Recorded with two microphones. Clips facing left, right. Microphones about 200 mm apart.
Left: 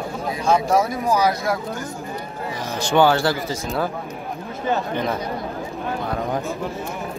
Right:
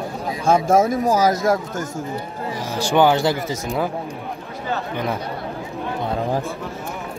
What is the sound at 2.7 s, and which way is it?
Speech, 15° right (ahead or behind).